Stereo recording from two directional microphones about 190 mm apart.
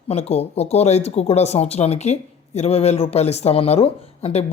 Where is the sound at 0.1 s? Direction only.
35° left (ahead or behind).